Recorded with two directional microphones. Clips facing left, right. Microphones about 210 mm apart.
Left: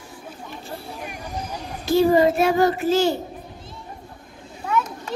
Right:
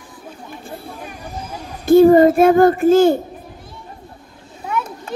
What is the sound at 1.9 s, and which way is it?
Speech, 55° right (ahead or behind).